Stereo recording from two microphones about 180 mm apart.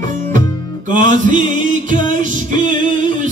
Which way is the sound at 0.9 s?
45° right (ahead or behind).